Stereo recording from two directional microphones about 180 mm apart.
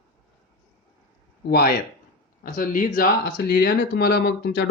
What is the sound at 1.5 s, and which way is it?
Speech, 60° left (ahead or behind).